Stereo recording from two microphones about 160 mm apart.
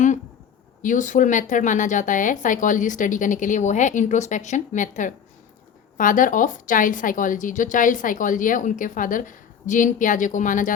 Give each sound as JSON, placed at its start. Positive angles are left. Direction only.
{"t": 0.8, "sound": "a woman's voice", "side_deg": 55}